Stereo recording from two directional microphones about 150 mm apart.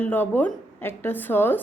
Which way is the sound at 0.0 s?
10° left (ahead or behind).